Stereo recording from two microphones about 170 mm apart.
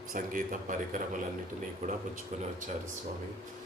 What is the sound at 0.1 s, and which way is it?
Speech, 50° right (ahead or behind).